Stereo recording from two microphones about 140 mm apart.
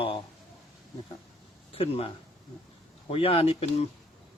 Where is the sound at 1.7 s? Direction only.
45° left (ahead or behind).